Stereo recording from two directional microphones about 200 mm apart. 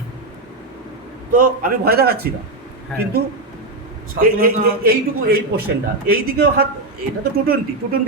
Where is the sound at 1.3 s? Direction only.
45° right (ahead or behind).